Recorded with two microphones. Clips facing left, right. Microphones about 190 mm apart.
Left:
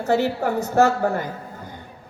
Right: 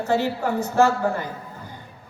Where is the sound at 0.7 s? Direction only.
40° left (ahead or behind).